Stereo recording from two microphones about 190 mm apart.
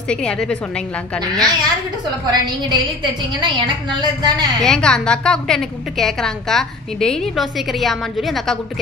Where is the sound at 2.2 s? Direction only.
20° right (ahead or behind).